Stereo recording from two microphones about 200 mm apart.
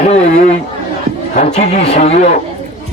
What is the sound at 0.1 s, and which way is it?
Chatter, 35° left (ahead or behind).